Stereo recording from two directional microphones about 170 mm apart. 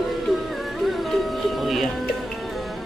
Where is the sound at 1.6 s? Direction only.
Centre (ahead or behind).